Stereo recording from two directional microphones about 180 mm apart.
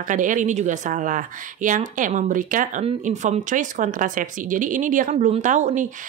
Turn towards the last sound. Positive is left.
turn(degrees=-45)  # may be behind; listen again after turning